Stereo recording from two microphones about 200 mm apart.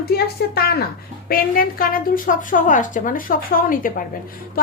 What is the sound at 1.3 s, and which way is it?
A woman's voice, 45° left (ahead or behind).